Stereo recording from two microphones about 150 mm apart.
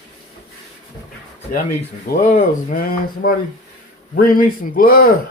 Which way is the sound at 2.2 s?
55° left (ahead or behind).